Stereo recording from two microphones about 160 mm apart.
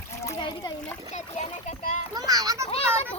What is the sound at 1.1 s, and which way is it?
Speech, 45° left (ahead or behind).